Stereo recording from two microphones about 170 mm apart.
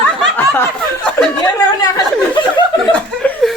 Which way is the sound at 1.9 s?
30° left (ahead or behind).